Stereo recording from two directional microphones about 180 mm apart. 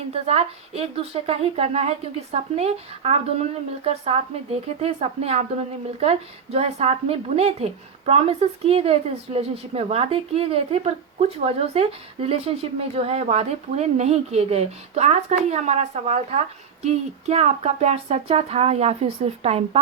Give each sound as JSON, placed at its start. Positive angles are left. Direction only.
{"t": 0.1, "sound": "a woman's voice", "side_deg": -35}